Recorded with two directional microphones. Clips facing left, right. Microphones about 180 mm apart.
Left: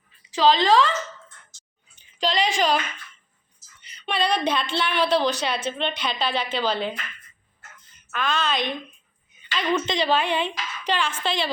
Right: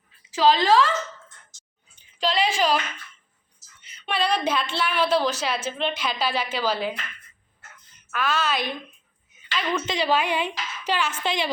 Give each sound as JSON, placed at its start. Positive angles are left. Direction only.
{"t": 0.3, "sound": "a woman's voice", "side_deg": -5}
{"t": 2.1, "sound": "a woman's voice", "side_deg": -5}
{"t": 3.8, "sound": "a woman's voice", "side_deg": -5}
{"t": 8.1, "sound": "a woman's voice", "side_deg": -5}